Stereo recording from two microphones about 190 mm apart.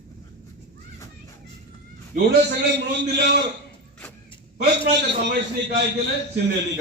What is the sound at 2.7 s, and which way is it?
Speech, 65° right (ahead or behind).